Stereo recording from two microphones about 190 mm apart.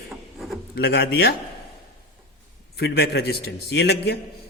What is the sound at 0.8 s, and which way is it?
Speech, 55° left (ahead or behind).